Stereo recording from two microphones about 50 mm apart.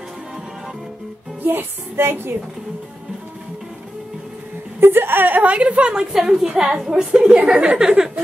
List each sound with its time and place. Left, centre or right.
1.4 s music: right
4.7 s a woman's voice: right; by 6.0 s centre
6.1 s a woman's voice: centre
6.9 s a woman's voice: right